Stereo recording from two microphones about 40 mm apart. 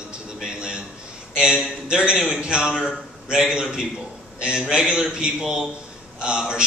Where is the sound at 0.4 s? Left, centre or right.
Centre.